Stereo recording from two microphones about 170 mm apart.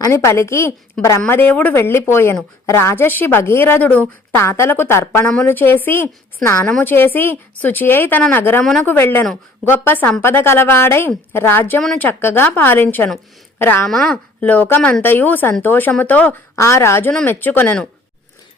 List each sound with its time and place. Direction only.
0.0 s speech: 15° left (ahead or behind)
9.0 s speech: 15° left (ahead or behind)